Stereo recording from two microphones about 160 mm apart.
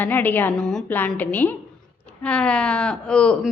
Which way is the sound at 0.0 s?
10° left (ahead or behind).